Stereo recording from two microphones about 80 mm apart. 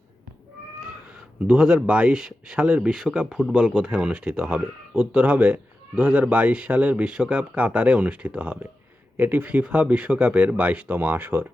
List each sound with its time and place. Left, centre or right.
1.5 s speech: centre